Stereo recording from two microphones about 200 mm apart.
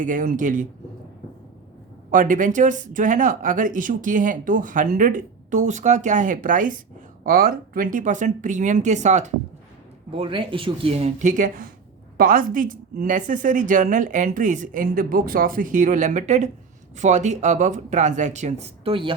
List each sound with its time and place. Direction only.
0.0 s speech: 40° right (ahead or behind)
2.0 s speech: 40° right (ahead or behind)
10.1 s speech: 25° right (ahead or behind)